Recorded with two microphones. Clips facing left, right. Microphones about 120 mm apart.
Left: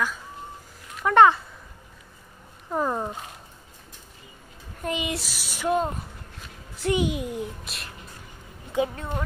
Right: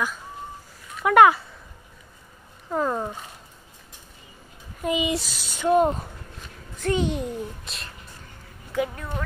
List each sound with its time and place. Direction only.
1.0 s speech: 10° right (ahead or behind)
2.7 s a child's voice: 10° left (ahead or behind)
4.8 s speech: centre (ahead or behind)
6.8 s a child's voice: 15° left (ahead or behind)
8.7 s a woman's voice: 25° left (ahead or behind)